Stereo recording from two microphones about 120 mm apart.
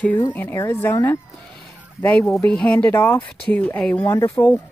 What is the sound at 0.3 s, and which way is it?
A woman's voice, 15° left (ahead or behind).